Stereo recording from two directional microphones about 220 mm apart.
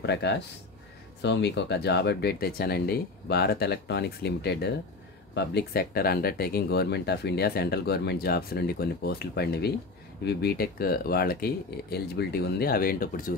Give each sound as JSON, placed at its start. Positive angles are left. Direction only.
{"t": 0.0, "sound": "speech", "side_deg": 50}